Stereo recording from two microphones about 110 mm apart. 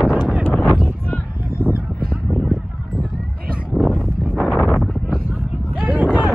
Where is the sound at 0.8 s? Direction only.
20° left (ahead or behind).